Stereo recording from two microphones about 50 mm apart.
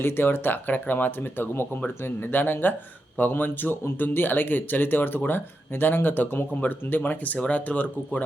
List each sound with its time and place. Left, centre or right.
0.0 s speech: left
7.3 s speech: left